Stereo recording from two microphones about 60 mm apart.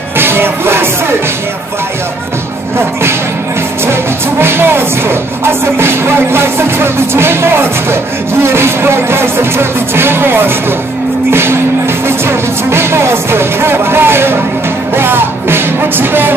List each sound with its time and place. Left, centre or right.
0.2 s music: right
4.4 s music: right